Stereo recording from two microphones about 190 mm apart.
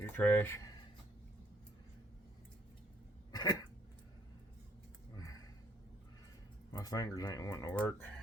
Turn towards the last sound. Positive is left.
turn(degrees=10)  # may be behind; listen again after turning